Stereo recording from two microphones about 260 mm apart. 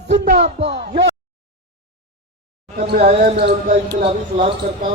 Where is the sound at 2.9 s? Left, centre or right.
Right.